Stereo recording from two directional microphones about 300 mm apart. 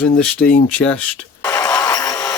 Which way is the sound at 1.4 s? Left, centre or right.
Centre.